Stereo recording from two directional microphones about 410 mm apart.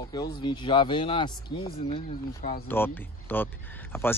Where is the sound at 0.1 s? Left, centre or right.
Centre.